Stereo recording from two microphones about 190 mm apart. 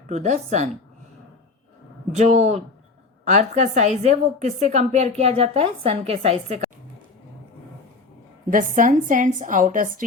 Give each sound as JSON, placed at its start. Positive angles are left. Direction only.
{"t": 0.1, "sound": "a woman's voice", "side_deg": -40}
{"t": 2.1, "sound": "a woman's voice", "side_deg": -40}
{"t": 8.4, "sound": "a woman's voice", "side_deg": -45}